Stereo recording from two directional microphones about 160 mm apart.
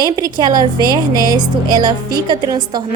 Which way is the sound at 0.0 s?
25° right (ahead or behind).